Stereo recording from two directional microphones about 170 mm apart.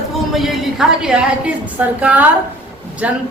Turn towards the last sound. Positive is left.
turn(degrees=-10)  # may be behind; listen again after turning